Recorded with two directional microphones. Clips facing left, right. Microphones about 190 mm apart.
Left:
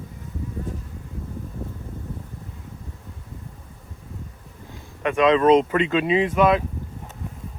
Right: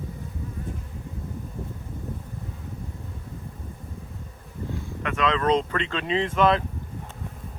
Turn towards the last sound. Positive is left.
turn(degrees=10)  # may be behind; listen again after turning